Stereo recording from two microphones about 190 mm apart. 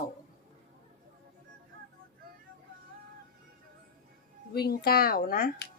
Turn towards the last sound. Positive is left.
turn(degrees=50)  # may be behind; listen again after turning